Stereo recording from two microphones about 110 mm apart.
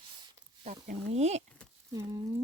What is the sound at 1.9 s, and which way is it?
Speech, 30° right (ahead or behind).